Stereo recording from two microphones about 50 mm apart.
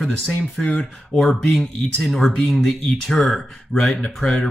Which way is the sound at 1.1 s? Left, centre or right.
Centre.